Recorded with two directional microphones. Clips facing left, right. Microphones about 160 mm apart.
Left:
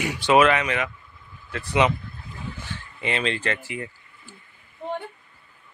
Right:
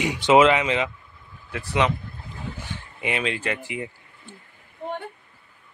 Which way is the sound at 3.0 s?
10° right (ahead or behind).